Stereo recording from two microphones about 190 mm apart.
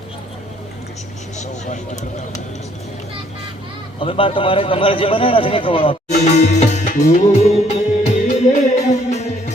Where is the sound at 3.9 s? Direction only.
30° left (ahead or behind).